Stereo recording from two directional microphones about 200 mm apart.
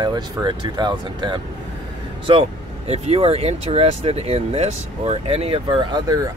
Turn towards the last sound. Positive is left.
turn(degrees=-20)  # may be behind; listen again after turning